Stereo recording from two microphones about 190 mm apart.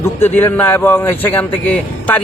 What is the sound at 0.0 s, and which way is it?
Speech, 10° left (ahead or behind).